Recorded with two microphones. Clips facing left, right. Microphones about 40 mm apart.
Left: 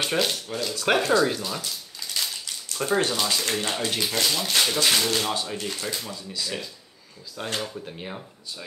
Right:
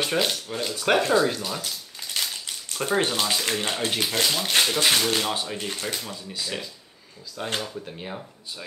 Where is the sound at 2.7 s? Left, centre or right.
Centre.